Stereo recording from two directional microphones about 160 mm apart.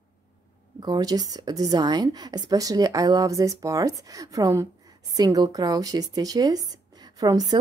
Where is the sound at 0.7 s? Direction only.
25° right (ahead or behind).